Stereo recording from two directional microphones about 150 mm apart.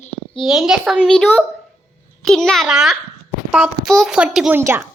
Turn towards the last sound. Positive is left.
turn(degrees=-15)  # may be behind; listen again after turning